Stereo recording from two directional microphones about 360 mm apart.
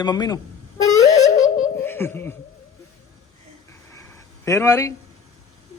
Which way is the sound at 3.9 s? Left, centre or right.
Centre.